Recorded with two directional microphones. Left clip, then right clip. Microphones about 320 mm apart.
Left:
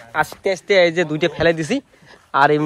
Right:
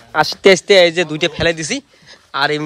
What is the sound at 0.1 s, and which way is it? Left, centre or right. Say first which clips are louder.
Speech: right 9 dB; right.